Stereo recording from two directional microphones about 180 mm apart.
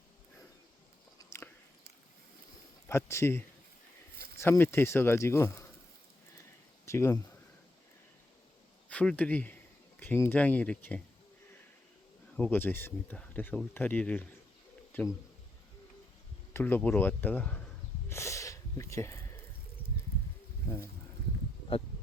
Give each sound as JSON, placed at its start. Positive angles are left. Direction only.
{"t": 1.2, "sound": "biting", "side_deg": 15}
{"t": 2.9, "sound": "speech", "side_deg": 15}
{"t": 6.8, "sound": "speech", "side_deg": 15}
{"t": 8.9, "sound": "a man's voice", "side_deg": 10}
{"t": 12.4, "sound": "speech", "side_deg": 10}
{"t": 16.5, "sound": "speech", "side_deg": 10}
{"t": 18.1, "sound": "sniff", "side_deg": 15}